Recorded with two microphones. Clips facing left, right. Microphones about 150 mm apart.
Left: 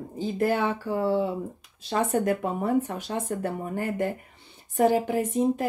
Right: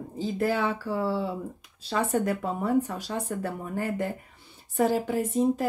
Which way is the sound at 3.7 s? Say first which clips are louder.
Even; 50° left (ahead or behind).